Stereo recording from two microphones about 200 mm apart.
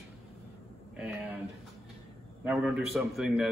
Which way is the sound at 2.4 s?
5° right (ahead or behind).